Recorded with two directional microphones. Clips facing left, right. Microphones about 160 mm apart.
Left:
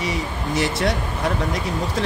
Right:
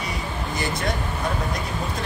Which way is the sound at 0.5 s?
80° left.